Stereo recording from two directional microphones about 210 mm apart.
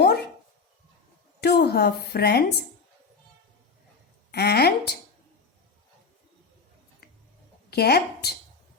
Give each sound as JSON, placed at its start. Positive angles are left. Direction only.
{"t": 0.0, "sound": "dog", "side_deg": 50}
{"t": 1.4, "sound": "a woman's voice", "side_deg": 50}
{"t": 4.3, "sound": "a woman's voice", "side_deg": 50}
{"t": 7.0, "sound": "tick-tock", "side_deg": 45}
{"t": 7.7, "sound": "a woman's voice", "side_deg": 50}